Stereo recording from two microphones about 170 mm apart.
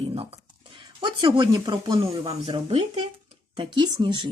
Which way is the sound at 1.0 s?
25° right (ahead or behind).